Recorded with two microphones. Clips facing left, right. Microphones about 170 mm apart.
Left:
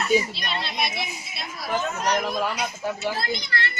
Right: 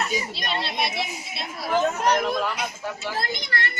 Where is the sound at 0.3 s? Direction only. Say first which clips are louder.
Right 1 dB; 40° right (ahead or behind).